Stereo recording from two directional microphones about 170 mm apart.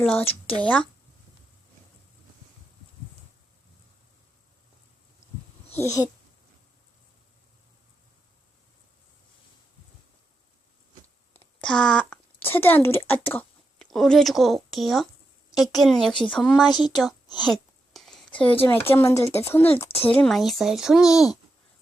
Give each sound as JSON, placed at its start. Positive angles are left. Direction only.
{"t": 0.0, "sound": "speech", "side_deg": 5}
{"t": 5.7, "sound": "speech", "side_deg": 20}
{"t": 11.3, "sound": "a sound", "side_deg": 5}
{"t": 13.9, "sound": "speech", "side_deg": 0}
{"t": 17.4, "sound": "a sound", "side_deg": 0}
{"t": 18.6, "sound": "speech", "side_deg": 10}